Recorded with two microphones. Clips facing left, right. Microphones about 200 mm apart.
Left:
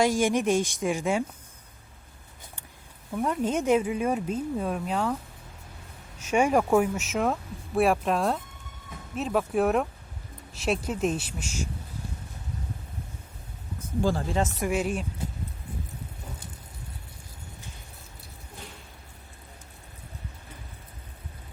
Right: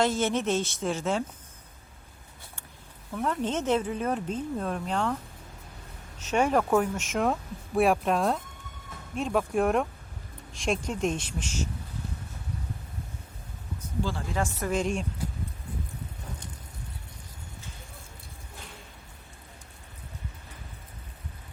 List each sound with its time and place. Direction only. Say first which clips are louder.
0.0 s speech: left 3 dB; 10° left (ahead or behind)
3.2 s speech: left 2 dB; 10° left (ahead or behind)
6.1 s speech: left 2 dB; 10° left (ahead or behind)
14.0 s speech: left 6 dB; 45° left (ahead or behind)
14.3 s a woman's voice: left 3 dB; 20° left (ahead or behind)
14.7 s speech: even; 5° left (ahead or behind)